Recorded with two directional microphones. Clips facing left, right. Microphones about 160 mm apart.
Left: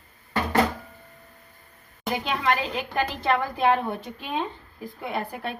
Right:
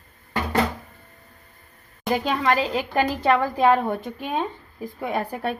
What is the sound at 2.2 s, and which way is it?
A woman's voice, 40° right (ahead or behind).